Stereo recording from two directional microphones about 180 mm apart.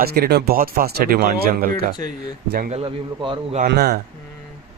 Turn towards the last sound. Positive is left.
turn(degrees=-65)  # may be behind; listen again after turning